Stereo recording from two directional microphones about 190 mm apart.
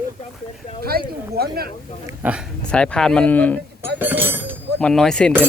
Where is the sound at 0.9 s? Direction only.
55° right (ahead or behind).